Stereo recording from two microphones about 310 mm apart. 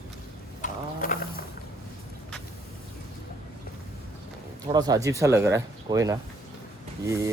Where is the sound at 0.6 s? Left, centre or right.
Left.